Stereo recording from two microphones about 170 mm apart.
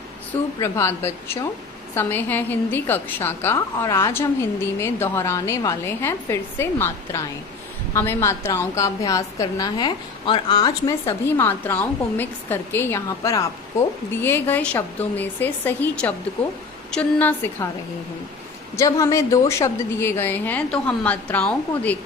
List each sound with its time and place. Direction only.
0.3 s a woman's voice: 15° left (ahead or behind)
18.8 s a woman's voice: 20° left (ahead or behind)